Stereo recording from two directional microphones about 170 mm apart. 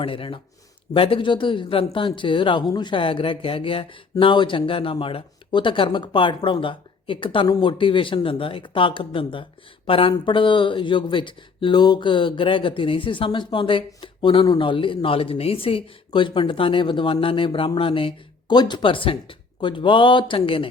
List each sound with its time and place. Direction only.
0.0 s speech: 30° left (ahead or behind)